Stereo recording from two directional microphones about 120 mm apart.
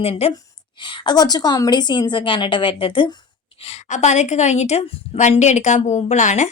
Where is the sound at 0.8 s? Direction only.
40° left (ahead or behind).